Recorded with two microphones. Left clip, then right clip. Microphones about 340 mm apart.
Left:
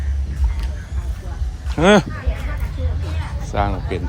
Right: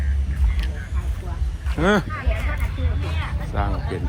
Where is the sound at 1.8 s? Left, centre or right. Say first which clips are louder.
Left 6 dB; centre.